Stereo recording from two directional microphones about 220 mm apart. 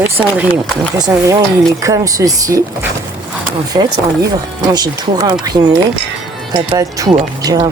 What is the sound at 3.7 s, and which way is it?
Speech, 20° right (ahead or behind).